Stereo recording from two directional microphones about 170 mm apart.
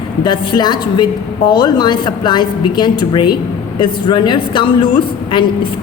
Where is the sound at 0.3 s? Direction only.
25° left (ahead or behind).